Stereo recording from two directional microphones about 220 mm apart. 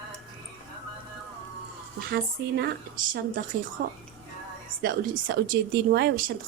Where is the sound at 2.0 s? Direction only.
45° right (ahead or behind).